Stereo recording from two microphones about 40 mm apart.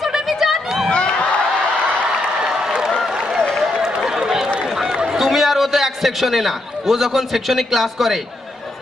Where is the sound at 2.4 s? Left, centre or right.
Centre.